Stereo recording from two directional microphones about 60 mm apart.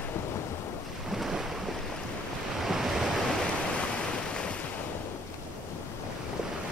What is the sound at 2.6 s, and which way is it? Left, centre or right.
Waves, centre.